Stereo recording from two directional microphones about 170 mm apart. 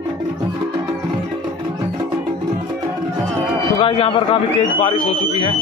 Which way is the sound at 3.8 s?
30° left (ahead or behind).